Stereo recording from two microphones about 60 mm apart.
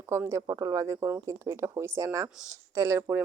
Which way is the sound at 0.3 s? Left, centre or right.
Right.